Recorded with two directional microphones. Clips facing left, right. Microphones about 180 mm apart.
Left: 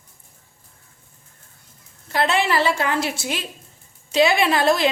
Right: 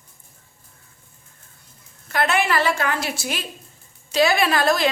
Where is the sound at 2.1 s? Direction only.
25° left (ahead or behind).